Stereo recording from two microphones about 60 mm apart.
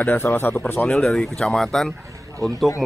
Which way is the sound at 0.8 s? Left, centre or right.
Centre.